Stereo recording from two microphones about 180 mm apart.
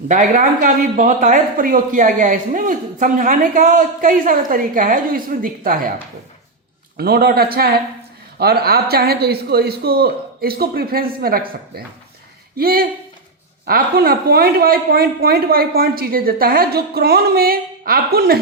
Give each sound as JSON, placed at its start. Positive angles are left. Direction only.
{"t": 0.1, "sound": "speech", "side_deg": -45}
{"t": 6.9, "sound": "speech", "side_deg": -60}